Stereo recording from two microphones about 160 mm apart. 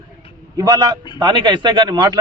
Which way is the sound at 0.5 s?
25° right (ahead or behind).